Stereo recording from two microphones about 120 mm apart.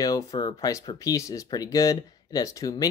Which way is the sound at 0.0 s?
30° left (ahead or behind).